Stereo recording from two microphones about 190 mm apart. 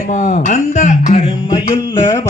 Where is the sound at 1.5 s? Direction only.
25° left (ahead or behind).